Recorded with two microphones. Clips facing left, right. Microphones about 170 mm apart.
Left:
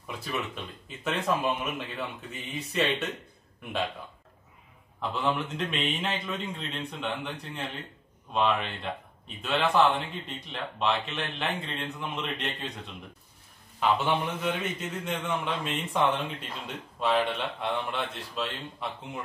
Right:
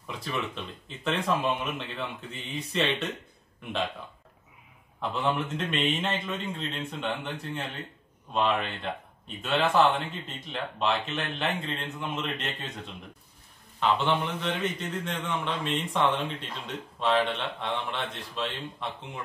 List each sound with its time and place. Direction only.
0.0 s a sound: 5° left (ahead or behind)
0.8 s speech: centre (ahead or behind)
5.1 s speech: centre (ahead or behind)